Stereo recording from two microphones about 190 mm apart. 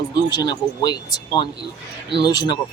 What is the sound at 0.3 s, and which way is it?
Speech, 20° left (ahead or behind).